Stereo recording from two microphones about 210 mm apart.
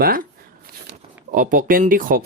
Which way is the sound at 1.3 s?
40° right (ahead or behind).